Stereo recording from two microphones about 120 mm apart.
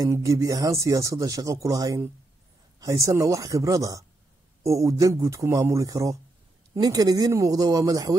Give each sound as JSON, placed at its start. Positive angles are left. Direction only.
{"t": 0.0, "sound": "speech", "side_deg": -25}